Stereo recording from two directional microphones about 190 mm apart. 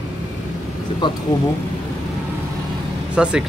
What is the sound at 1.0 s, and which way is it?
Speech, 25° left (ahead or behind).